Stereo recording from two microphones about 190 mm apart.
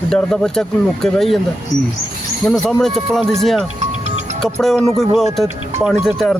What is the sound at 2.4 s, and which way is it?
Speech, centre (ahead or behind).